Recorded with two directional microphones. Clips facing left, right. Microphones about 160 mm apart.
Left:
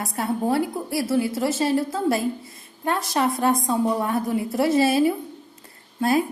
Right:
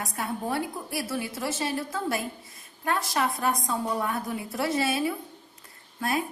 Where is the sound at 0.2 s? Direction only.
30° left (ahead or behind).